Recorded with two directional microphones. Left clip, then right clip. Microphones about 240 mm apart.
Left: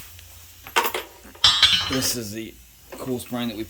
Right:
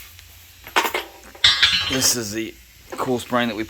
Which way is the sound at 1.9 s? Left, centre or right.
Centre.